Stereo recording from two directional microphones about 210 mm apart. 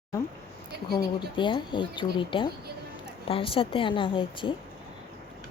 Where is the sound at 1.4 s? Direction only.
25° left (ahead or behind).